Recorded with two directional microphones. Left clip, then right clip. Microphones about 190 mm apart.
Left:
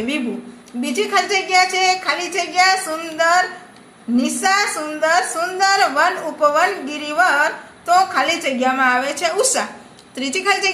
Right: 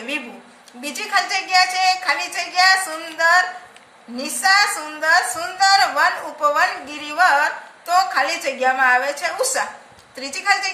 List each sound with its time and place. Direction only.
0.7 s a woman's voice: 45° left (ahead or behind)